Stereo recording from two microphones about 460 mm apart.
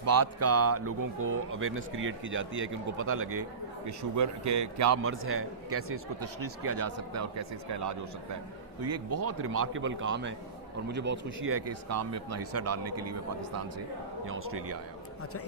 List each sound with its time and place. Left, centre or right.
0.0 s speech: right
0.9 s speech: right
1.5 s speech: right
9.1 s speech: right